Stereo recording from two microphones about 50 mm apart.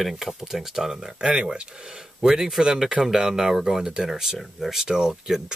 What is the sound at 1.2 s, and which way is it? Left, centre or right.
Speech, centre.